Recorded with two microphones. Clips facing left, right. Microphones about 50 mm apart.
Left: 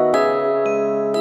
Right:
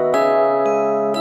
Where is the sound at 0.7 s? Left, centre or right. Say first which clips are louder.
Right 2 dB; right.